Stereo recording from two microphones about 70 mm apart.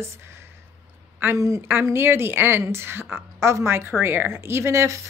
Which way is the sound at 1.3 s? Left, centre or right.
Right.